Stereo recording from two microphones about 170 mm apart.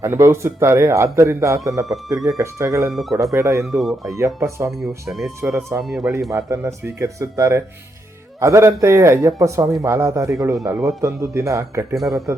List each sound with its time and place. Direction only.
0.0 s speech: 15° right (ahead or behind)
2.9 s speech: centre (ahead or behind)
3.3 s speech: 15° right (ahead or behind)
3.7 s speech: centre (ahead or behind)
4.1 s speech: 15° right (ahead or behind)
4.7 s speech: centre (ahead or behind)
6.3 s speech: 15° right (ahead or behind)
11.9 s speech: centre (ahead or behind)